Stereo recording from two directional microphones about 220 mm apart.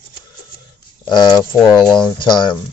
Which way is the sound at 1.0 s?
20° left (ahead or behind).